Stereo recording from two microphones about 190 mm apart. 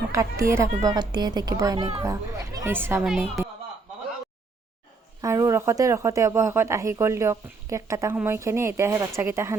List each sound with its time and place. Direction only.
0.1 s a child's voice: 15° right (ahead or behind)
3.4 s a sound: 15° right (ahead or behind)
5.2 s speech: 15° right (ahead or behind)